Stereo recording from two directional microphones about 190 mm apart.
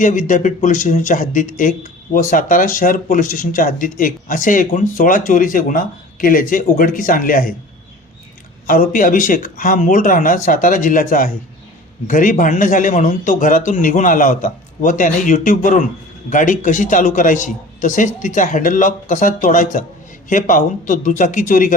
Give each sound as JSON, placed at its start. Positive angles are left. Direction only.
{"t": 0.0, "sound": "speech", "side_deg": 45}
{"t": 8.6, "sound": "speech", "side_deg": 45}